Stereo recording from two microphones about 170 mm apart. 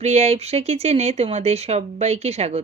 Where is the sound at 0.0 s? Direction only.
40° right (ahead or behind).